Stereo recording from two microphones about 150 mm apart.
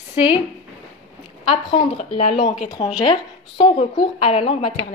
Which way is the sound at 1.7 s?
45° left (ahead or behind).